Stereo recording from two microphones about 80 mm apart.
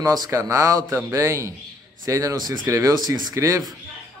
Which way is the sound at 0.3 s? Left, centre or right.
Right.